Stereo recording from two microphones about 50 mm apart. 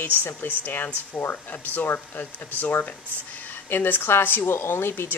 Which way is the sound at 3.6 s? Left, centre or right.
Left.